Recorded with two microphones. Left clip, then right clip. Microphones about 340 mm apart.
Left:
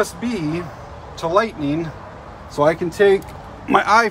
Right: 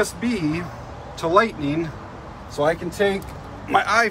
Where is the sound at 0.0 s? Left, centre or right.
Centre.